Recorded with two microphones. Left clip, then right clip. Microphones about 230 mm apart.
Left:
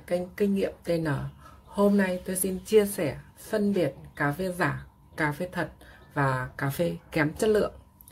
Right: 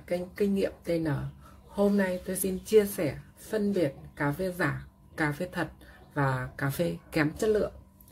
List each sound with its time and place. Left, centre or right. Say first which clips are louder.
0.0 s a woman's voice: left 2 dB; centre